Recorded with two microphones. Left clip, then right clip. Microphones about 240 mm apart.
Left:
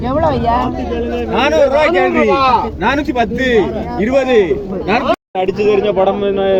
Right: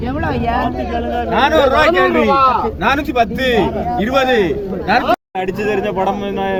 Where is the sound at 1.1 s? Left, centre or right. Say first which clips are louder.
Right 1 dB; right.